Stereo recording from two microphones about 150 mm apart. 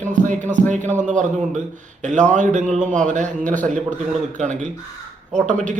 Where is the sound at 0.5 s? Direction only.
55° right (ahead or behind).